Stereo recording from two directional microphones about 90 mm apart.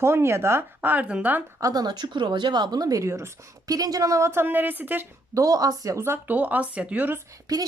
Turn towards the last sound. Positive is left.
turn(degrees=-40)  # may be behind; listen again after turning